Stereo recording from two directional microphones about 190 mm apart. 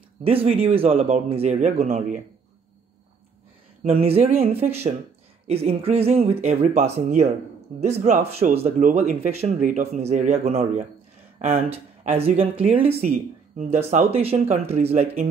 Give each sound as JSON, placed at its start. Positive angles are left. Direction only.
{"t": 0.2, "sound": "speech", "side_deg": -30}
{"t": 3.8, "sound": "speech", "side_deg": -30}